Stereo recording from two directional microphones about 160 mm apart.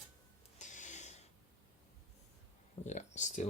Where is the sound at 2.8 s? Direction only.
45° left (ahead or behind).